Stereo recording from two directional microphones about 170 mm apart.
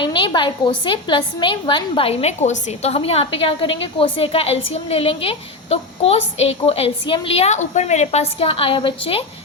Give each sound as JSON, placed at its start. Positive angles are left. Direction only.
{"t": 0.0, "sound": "a woman's voice", "side_deg": 30}